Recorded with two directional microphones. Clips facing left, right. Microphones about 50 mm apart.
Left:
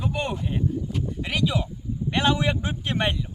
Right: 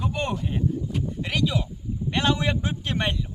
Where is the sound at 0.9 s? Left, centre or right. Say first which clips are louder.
Even; centre.